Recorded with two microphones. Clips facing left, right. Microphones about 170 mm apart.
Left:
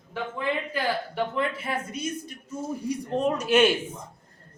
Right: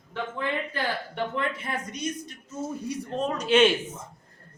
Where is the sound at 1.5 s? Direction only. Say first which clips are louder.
Left 2 dB; 5° left (ahead or behind).